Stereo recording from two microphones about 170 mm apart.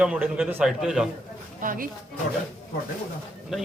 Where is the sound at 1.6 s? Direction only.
55° right (ahead or behind).